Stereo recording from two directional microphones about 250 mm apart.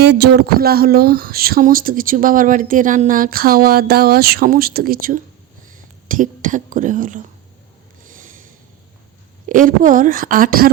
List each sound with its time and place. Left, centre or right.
0.0 s speech: right
8.1 s a sound: right
9.5 s speech: right